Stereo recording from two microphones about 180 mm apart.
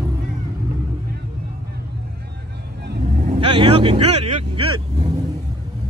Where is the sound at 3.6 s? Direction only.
30° right (ahead or behind).